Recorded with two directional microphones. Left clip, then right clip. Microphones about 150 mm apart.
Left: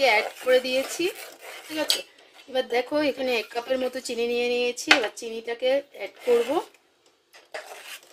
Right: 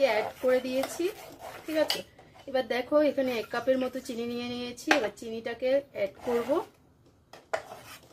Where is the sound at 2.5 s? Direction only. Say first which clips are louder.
Left 2 dB; 35° left (ahead or behind).